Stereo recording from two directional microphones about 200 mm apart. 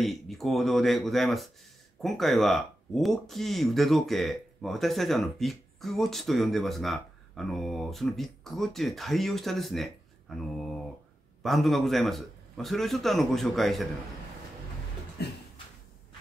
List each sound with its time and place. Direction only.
0.0 s speech: centre (ahead or behind)
11.4 s speech: centre (ahead or behind)
15.2 s a sound: 55° left (ahead or behind)